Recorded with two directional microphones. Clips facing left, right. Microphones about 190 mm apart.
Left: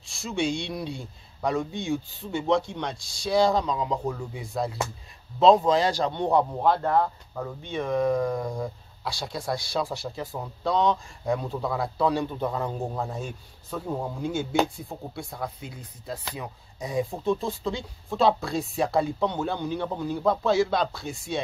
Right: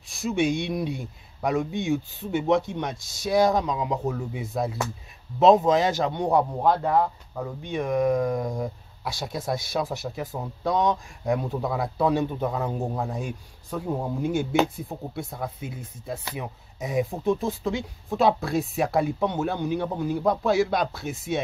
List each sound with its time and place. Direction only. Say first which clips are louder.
0.0 s speech: right 4 dB; 20° right (ahead or behind)